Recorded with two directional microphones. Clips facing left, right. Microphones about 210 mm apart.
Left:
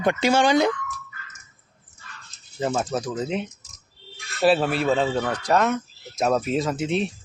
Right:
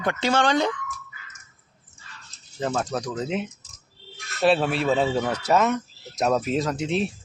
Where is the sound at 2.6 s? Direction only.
10° left (ahead or behind).